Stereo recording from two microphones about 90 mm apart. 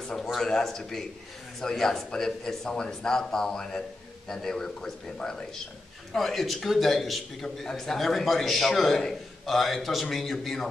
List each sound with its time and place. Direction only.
0.0 s a man's voice: 5° left (ahead or behind)